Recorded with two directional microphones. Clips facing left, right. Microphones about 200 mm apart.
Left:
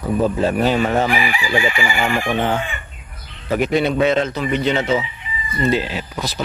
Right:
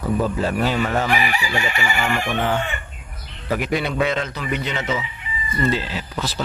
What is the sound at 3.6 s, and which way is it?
Speech, 25° left (ahead or behind).